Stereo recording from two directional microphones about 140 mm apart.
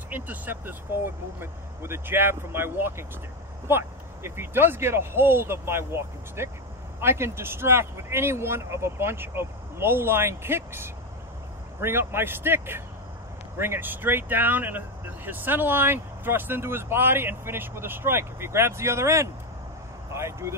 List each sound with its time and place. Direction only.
0.1 s speech: 15° right (ahead or behind)